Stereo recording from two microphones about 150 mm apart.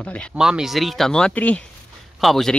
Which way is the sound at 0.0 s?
10° left (ahead or behind).